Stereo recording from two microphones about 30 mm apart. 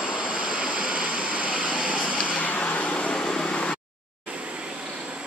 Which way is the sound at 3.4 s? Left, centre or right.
Left.